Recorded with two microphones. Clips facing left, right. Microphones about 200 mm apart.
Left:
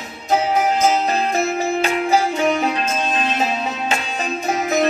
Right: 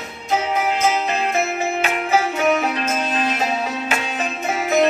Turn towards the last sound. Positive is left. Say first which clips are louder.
# even
turn(degrees=35)  # may be behind; listen again after turning